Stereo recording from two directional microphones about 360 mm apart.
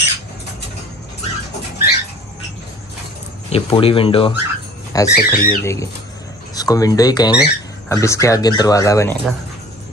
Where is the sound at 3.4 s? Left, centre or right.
Centre.